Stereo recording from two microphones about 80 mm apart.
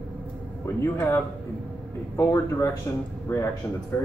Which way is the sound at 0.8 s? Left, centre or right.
Left.